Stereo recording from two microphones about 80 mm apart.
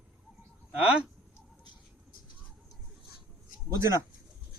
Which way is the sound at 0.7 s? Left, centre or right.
Centre.